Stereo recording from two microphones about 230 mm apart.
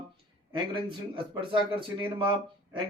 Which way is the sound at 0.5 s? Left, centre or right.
Right.